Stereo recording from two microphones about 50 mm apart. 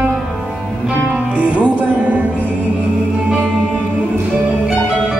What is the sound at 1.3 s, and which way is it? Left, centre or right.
Music, right.